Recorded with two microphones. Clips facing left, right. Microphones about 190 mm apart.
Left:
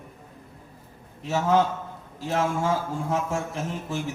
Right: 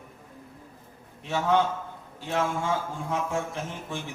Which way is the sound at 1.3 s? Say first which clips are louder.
Left 2 dB; 40° left (ahead or behind).